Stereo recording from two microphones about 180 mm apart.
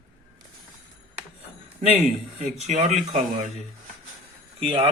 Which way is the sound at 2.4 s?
40° right (ahead or behind).